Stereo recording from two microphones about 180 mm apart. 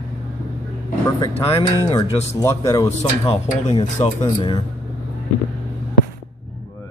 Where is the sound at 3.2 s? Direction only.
35° left (ahead or behind).